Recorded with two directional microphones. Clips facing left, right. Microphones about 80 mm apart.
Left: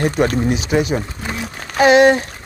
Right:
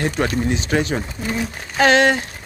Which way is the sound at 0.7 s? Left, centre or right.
Centre.